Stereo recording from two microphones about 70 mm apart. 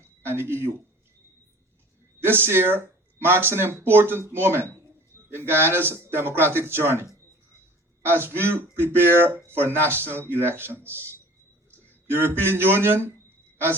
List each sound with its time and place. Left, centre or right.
0.3 s speech: right
2.5 s speech: right
12.1 s speech: right